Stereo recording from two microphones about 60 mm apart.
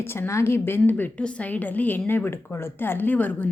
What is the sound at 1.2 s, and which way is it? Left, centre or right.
A woman's voice, centre.